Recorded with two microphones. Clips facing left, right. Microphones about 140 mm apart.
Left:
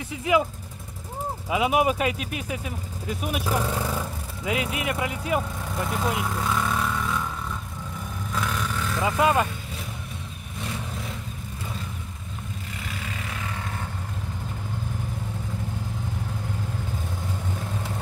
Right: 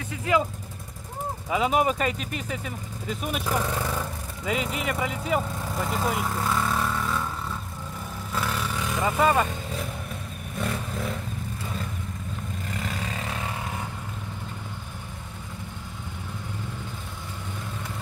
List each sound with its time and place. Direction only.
0.1 s speech: 15° left (ahead or behind)
1.5 s speech: 10° left (ahead or behind)
8.3 s vehicle: 5° right (ahead or behind)
12.7 s vehicle: 40° right (ahead or behind)